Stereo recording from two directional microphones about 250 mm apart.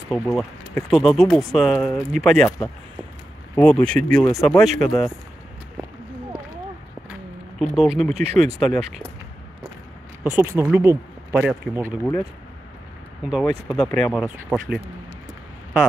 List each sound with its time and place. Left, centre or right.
0.1 s speech: centre
7.1 s a sound: centre
8.1 s speech: right
8.5 s speech: centre
10.2 s speech: centre
13.2 s speech: centre